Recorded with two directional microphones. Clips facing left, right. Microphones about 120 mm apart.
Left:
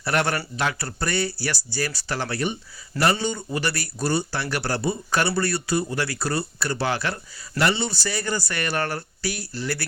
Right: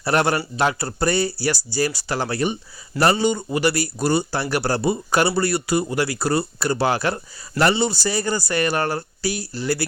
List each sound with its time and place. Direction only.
0.0 s speech: 35° right (ahead or behind)
5.3 s speech: 10° right (ahead or behind)
5.8 s speech: 30° right (ahead or behind)